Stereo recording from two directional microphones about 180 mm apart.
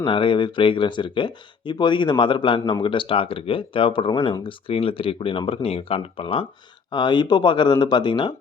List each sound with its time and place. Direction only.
0.0 s speech: 30° left (ahead or behind)